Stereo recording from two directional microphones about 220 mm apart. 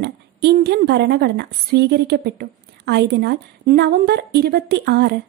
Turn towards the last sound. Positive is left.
turn(degrees=-50)  # may be behind; listen again after turning